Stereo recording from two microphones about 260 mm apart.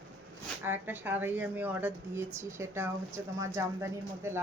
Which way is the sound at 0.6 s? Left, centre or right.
Centre.